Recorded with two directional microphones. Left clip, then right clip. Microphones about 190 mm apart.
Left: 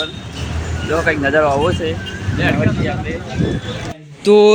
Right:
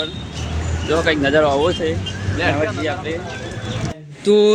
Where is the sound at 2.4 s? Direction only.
30° right (ahead or behind).